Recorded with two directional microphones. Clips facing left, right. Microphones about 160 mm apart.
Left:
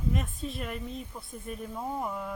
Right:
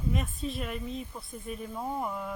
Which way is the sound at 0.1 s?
Centre (ahead or behind).